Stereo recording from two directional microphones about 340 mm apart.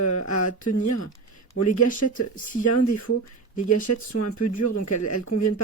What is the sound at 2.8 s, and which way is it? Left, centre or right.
Speech, left.